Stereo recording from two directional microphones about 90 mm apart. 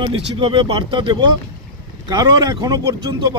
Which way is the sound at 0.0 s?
80° right.